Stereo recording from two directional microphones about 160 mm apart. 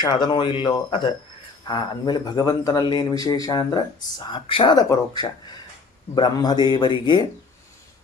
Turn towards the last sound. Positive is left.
turn(degrees=30)  # may be behind; listen again after turning